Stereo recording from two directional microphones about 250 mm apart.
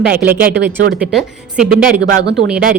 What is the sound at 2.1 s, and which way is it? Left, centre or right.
Speech, right.